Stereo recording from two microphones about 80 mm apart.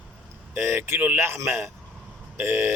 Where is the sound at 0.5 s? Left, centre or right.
Right.